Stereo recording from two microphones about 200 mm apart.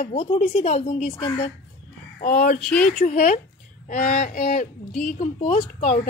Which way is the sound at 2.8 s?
40° left (ahead or behind).